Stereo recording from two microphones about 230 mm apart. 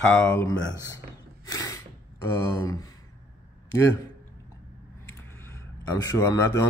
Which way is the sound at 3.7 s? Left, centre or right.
Centre.